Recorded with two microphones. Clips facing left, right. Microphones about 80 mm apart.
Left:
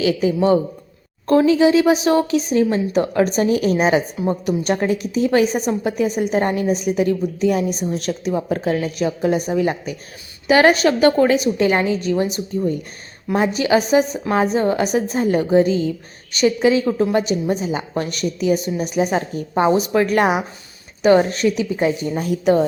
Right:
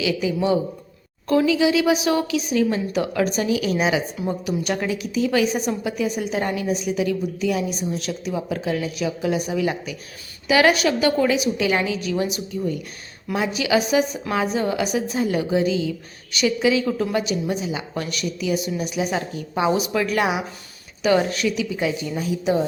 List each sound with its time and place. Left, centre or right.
0.0 s a woman's voice: left
22.3 s speech: left